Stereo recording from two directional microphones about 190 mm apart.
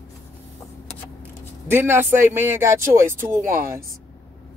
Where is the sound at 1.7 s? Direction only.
10° right (ahead or behind).